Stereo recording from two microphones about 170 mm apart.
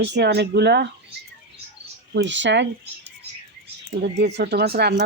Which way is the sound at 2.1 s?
90° right.